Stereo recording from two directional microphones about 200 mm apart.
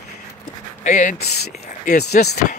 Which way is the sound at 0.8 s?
40° left (ahead or behind).